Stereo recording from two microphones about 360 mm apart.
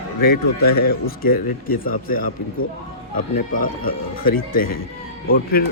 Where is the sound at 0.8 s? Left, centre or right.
Left.